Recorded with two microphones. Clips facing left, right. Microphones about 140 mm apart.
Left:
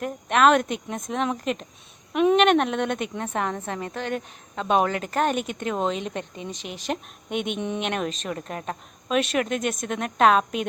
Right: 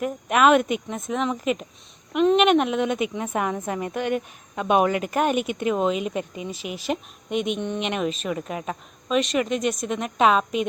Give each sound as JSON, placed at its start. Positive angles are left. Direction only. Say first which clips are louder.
{"t": 0.0, "sound": "a woman's voice", "louder": "even", "side_deg": -5}